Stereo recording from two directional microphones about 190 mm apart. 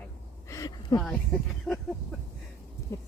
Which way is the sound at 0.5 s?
20° left (ahead or behind).